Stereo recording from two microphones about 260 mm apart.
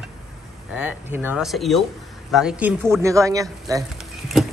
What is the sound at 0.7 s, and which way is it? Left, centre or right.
Speech, centre.